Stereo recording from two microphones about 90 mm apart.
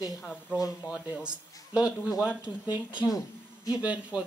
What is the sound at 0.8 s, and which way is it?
Speech, 15° right (ahead or behind).